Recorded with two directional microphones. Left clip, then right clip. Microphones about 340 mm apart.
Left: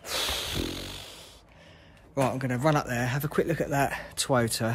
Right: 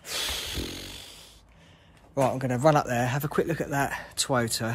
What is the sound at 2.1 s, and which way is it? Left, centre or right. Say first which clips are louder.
Speech: right 2 dB; centre.